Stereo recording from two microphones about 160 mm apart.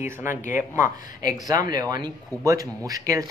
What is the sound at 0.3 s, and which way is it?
Speech, 55° left (ahead or behind).